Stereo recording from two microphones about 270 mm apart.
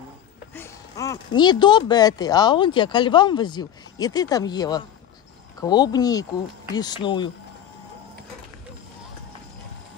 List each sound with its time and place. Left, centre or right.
0.6 s speech: centre